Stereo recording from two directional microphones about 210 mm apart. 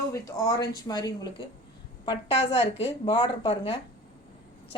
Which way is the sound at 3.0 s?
20° left (ahead or behind).